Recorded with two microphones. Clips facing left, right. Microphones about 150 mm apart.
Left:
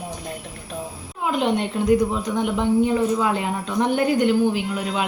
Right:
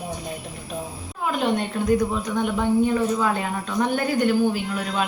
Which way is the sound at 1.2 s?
20° left (ahead or behind).